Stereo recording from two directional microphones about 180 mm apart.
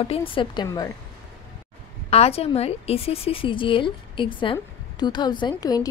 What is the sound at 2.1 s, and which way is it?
A woman's voice, 35° left (ahead or behind).